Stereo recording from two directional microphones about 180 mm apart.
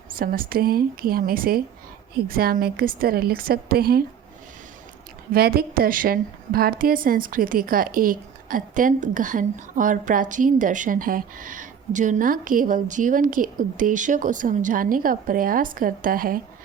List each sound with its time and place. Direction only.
0.2 s a woman's voice: 55° right (ahead or behind)
5.3 s a woman's voice: 55° right (ahead or behind)